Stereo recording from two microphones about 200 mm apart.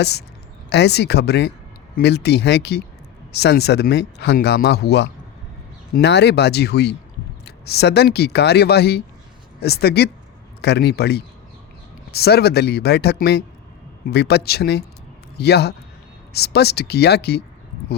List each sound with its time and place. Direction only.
0.0 s speech: 55° left (ahead or behind)